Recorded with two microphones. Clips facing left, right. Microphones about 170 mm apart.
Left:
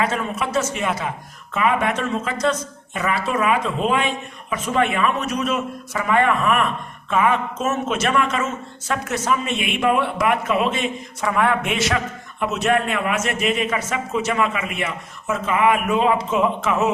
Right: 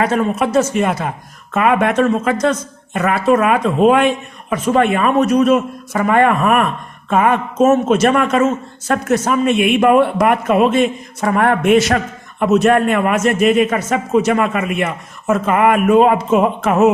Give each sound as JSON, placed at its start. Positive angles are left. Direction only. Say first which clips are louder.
{"t": 0.0, "sound": "speech", "louder": "right 7 dB", "side_deg": -45}